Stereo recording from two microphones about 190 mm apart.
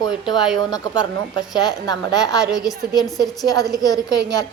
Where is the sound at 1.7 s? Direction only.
20° left (ahead or behind).